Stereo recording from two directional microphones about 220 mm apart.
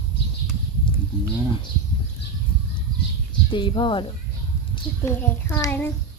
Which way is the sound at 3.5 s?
20° left (ahead or behind).